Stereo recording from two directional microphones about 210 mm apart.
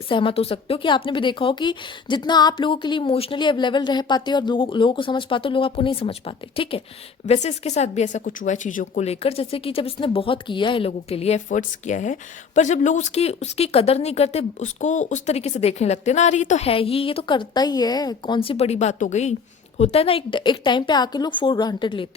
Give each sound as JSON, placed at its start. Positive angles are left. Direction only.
{"t": 0.1, "sound": "speech", "side_deg": 25}